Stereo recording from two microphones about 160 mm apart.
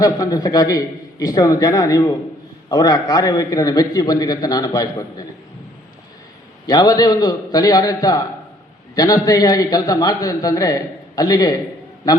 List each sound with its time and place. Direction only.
0.0 s a man's voice: 25° left (ahead or behind)
6.7 s a man's voice: 25° left (ahead or behind)